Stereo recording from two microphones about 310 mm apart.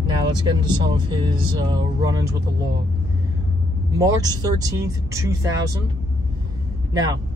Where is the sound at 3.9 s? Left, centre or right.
Centre.